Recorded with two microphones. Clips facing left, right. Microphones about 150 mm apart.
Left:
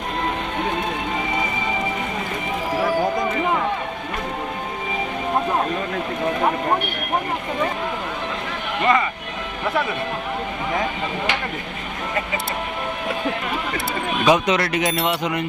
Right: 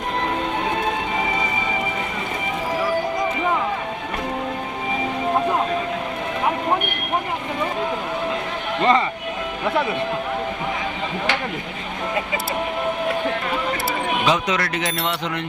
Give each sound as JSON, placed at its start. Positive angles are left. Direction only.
{"t": 8.8, "sound": "speech", "side_deg": -30}
{"t": 14.3, "sound": "speech", "side_deg": 20}
{"t": 14.8, "sound": "a sound", "side_deg": 0}